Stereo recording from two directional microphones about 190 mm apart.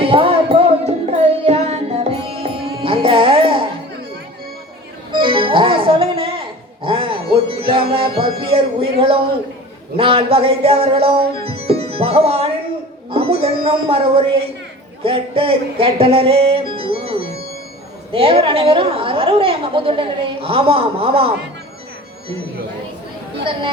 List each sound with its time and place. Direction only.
0.0 s music: 30° right (ahead or behind)
5.2 s music: 25° right (ahead or behind)
10.0 s a woman's voice: 30° right (ahead or behind)
11.4 s music: 30° right (ahead or behind)
18.1 s a woman's voice: 30° right (ahead or behind)
23.4 s speech: 30° right (ahead or behind)